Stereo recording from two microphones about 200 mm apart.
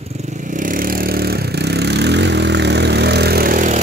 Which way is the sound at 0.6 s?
45° right (ahead or behind).